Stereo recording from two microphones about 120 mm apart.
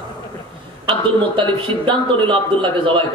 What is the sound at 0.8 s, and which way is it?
A man's voice, 45° right (ahead or behind).